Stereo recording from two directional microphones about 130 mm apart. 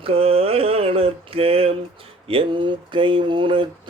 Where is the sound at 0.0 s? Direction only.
45° right (ahead or behind).